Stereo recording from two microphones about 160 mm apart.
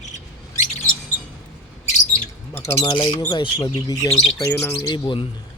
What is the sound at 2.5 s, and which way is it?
Speech, 15° left (ahead or behind).